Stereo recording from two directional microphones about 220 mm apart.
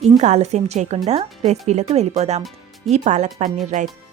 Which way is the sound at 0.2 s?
30° right (ahead or behind).